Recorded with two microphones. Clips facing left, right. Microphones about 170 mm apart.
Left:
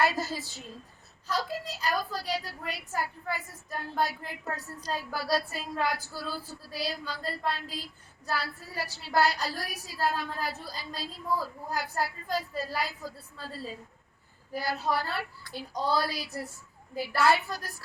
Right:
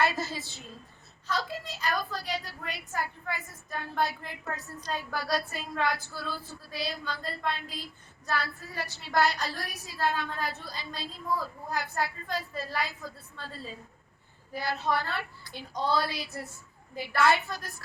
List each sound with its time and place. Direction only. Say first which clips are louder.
0.0 s a woman's voice: left 1 dB; 35° left (ahead or behind)
12.6 s a woman's voice: even; 10° left (ahead or behind)
13.1 s a woman's voice: left 2 dB; 35° left (ahead or behind)
15.7 s a woman's voice: even; 10° left (ahead or behind)
16.0 s a woman's voice: left 1 dB; 35° left (ahead or behind)